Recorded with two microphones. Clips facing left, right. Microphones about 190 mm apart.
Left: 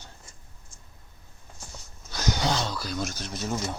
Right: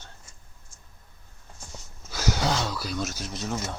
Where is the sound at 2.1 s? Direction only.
5° right (ahead or behind).